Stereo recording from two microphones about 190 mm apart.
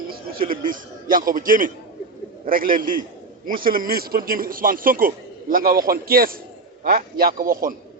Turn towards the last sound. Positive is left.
turn(degrees=-50)  # may be behind; listen again after turning